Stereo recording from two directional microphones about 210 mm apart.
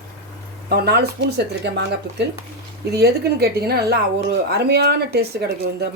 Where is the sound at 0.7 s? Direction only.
50° right (ahead or behind).